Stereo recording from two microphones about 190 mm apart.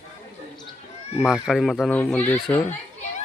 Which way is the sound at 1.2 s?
Centre (ahead or behind).